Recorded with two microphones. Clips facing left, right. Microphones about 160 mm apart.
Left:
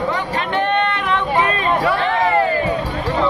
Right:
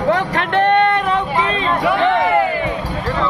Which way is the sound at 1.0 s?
40° right (ahead or behind).